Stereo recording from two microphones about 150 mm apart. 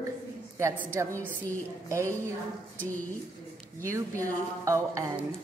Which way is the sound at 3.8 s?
20° right (ahead or behind).